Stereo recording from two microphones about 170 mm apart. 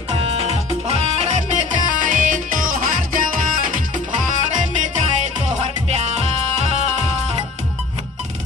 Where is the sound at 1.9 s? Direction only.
50° right (ahead or behind).